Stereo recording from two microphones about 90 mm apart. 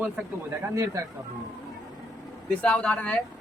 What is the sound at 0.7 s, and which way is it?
Speech, 40° right (ahead or behind).